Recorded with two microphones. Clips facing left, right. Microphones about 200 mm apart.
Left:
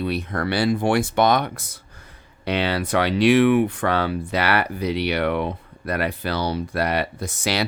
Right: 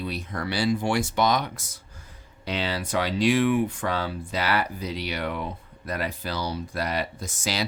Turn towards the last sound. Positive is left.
turn(degrees=65)  # may be behind; listen again after turning